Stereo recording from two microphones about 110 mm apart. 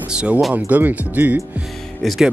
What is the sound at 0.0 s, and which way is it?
Speech, 10° right (ahead or behind).